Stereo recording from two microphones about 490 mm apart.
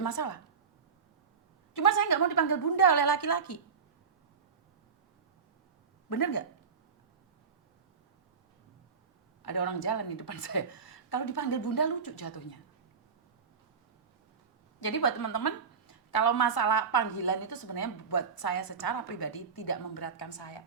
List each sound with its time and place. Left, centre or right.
0.0 s a woman's voice: left
1.7 s a woman's voice: left
6.1 s a woman's voice: left
9.5 s a woman's voice: left
14.8 s a woman's voice: left